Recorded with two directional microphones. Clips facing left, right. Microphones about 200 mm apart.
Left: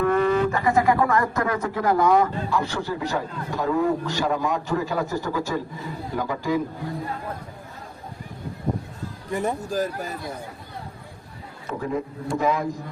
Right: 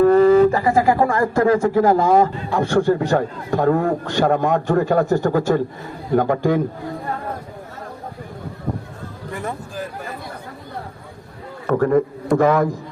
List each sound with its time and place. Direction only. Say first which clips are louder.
0.0 s speech: right 9 dB; 35° right (ahead or behind)
2.5 s a man's voice: right 9 dB; 50° right (ahead or behind)
9.3 s speech: left 3 dB; 20° left (ahead or behind)
9.6 s speech: left 4 dB; 40° left (ahead or behind)
11.6 s a man's voice: right 11 dB; 65° right (ahead or behind)